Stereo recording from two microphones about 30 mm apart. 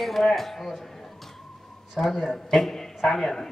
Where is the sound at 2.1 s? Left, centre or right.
Centre.